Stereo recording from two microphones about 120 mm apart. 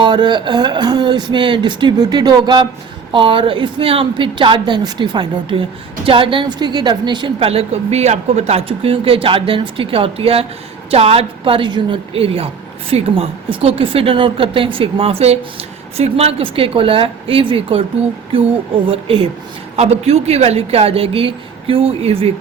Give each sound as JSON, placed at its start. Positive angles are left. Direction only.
{"t": 0.0, "sound": "a woman's voice", "side_deg": -40}
{"t": 18.9, "sound": "a woman's voice", "side_deg": -50}